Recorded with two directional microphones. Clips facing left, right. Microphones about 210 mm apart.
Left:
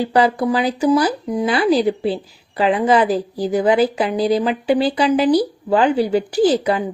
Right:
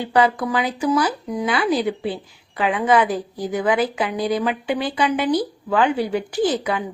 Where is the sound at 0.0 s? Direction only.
35° left (ahead or behind).